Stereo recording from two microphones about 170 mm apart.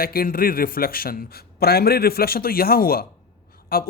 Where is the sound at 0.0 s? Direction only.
60° left (ahead or behind).